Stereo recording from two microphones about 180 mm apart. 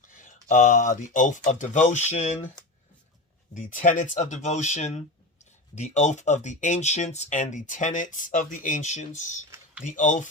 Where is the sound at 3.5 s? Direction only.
45° left (ahead or behind).